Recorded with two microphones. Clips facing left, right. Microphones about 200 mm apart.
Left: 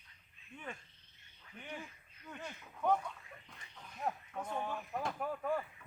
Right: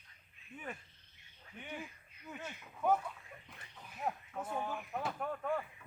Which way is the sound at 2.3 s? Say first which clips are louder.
Right 1 dB; 5° right (ahead or behind).